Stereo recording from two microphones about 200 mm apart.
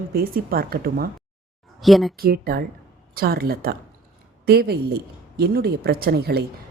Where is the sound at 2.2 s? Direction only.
50° right (ahead or behind).